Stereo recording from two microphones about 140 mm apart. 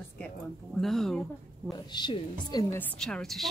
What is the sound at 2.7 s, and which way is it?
Speech, 5° left (ahead or behind).